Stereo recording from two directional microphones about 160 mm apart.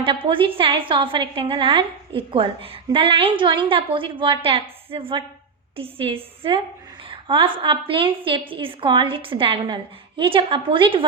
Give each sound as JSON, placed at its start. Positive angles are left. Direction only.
{"t": 0.0, "sound": "a woman's voice", "side_deg": -35}